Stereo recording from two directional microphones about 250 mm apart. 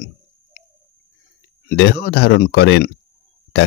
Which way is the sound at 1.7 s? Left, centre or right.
Left.